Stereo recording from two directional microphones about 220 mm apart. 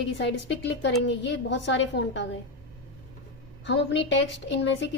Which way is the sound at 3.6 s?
55° left (ahead or behind).